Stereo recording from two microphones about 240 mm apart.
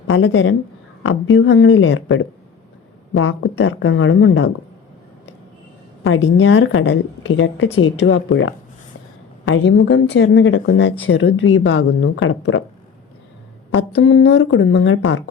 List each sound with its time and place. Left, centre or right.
0.1 s a woman's voice: left
6.1 s a woman's voice: left
13.7 s a woman's voice: left